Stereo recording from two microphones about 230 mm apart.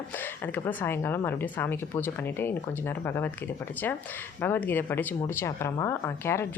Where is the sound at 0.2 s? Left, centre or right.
Centre.